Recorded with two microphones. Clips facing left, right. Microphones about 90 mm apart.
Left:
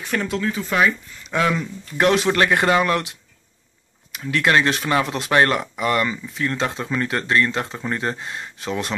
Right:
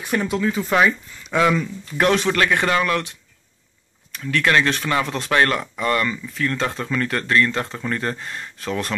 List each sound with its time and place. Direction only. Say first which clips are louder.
0.0 s speech: right 2 dB; 10° right (ahead or behind); by 2.3 s 5° left (ahead or behind)
2.6 s speech: left 2 dB; 20° left (ahead or behind)
4.2 s speech: even; 25° left (ahead or behind)